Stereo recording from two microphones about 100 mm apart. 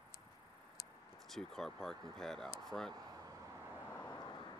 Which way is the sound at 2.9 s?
40° right (ahead or behind).